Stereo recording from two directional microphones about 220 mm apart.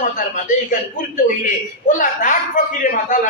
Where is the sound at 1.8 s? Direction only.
35° left (ahead or behind).